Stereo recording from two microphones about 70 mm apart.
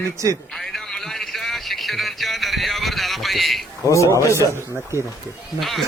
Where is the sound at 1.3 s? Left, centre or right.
Centre.